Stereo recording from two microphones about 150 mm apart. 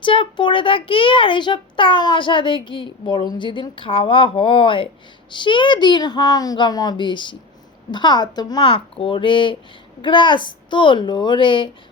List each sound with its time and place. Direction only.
0.0 s a child's voice: 35° left (ahead or behind)